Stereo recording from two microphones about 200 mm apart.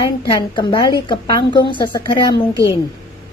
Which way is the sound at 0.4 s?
20° left (ahead or behind).